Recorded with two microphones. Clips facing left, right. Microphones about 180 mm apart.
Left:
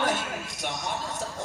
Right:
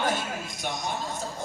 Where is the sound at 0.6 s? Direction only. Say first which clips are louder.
Right 1 dB; 75° left (ahead or behind).